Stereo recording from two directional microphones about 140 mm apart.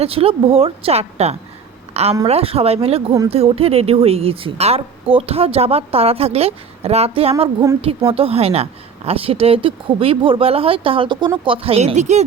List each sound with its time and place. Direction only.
0.0 s a woman's voice: 45° right (ahead or behind)
1.9 s a sound: 50° right (ahead or behind)
2.2 s a woman's voice: 45° right (ahead or behind)